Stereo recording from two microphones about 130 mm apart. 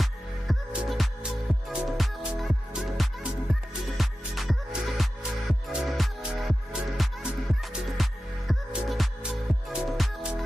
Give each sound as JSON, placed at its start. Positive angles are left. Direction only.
{"t": 0.0, "sound": "music", "side_deg": 0}